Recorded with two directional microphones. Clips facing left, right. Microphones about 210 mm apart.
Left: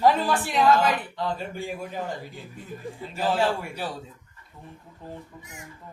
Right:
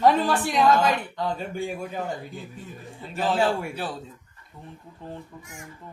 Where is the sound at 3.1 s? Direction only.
5° left (ahead or behind).